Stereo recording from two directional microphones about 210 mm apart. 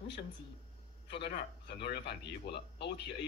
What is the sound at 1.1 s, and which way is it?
Speech, 55° left (ahead or behind).